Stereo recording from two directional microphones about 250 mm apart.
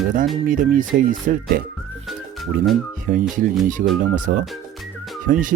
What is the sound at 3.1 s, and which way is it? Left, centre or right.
Speech, right.